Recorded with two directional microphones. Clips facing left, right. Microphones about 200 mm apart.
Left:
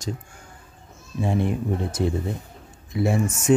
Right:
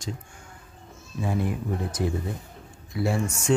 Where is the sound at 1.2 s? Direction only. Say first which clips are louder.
Left 4 dB; 25° left (ahead or behind).